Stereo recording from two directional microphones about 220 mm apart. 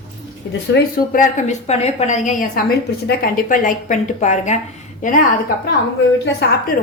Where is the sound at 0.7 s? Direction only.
35° left (ahead or behind).